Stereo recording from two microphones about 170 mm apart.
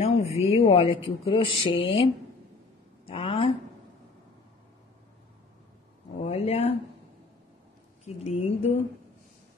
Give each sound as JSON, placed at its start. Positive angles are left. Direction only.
{"t": 0.0, "sound": "speech", "side_deg": 35}
{"t": 3.1, "sound": "speech", "side_deg": 35}
{"t": 6.2, "sound": "speech", "side_deg": 35}
{"t": 8.0, "sound": "speech", "side_deg": 40}